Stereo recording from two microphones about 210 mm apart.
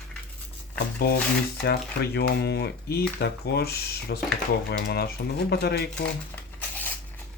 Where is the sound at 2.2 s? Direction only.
50° left (ahead or behind).